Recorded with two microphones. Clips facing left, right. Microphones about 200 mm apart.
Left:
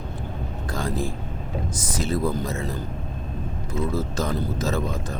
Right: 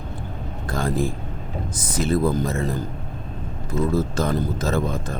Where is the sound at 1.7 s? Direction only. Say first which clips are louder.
Right 5 dB; 55° right (ahead or behind).